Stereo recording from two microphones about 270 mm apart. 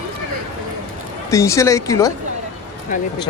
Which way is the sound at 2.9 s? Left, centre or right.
Left.